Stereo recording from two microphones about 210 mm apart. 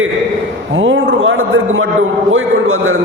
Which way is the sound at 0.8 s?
65° right (ahead or behind).